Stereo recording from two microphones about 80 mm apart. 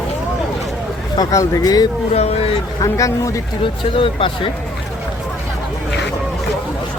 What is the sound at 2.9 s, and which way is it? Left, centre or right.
Speech, left.